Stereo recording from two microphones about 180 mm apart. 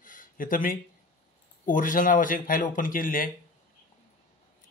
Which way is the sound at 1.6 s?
50° left (ahead or behind).